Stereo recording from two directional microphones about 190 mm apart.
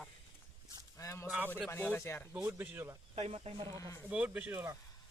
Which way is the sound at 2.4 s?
10° right (ahead or behind).